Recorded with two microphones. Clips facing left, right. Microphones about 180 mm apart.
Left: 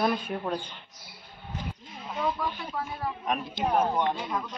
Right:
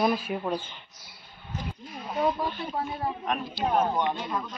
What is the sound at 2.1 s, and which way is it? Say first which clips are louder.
Speech: right 3 dB; 30° right (ahead or behind).